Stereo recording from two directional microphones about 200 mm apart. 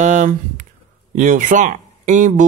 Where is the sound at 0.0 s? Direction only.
40° right (ahead or behind).